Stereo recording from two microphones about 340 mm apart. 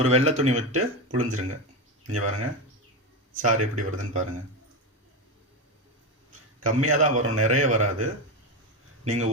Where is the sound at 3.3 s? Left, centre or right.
Right.